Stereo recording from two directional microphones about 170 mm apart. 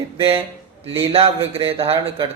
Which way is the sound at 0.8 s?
35° right (ahead or behind).